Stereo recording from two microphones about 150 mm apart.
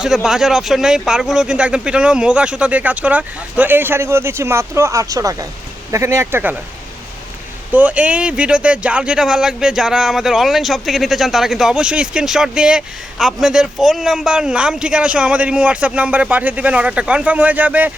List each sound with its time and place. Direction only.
0.0 s speech: 5° right (ahead or behind)
7.7 s speech: 10° right (ahead or behind)